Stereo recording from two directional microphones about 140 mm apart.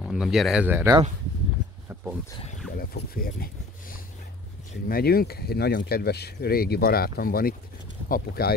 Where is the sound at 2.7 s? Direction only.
90° left.